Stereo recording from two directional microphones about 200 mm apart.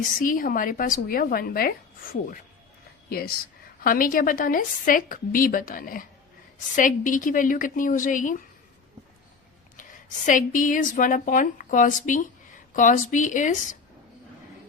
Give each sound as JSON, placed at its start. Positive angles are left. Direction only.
{"t": 0.0, "sound": "a woman's voice", "side_deg": 45}
{"t": 3.1, "sound": "a woman's voice", "side_deg": 50}
{"t": 9.7, "sound": "a woman's voice", "side_deg": 40}